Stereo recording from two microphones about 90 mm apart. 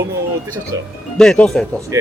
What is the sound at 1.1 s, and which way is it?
Speech, 5° left (ahead or behind).